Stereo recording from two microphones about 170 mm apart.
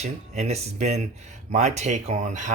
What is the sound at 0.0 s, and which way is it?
Speech, 40° right (ahead or behind).